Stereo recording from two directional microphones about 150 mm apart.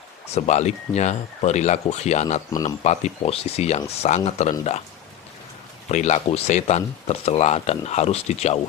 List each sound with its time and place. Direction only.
0.3 s speech: 50° left (ahead or behind)
5.9 s speech: 50° left (ahead or behind)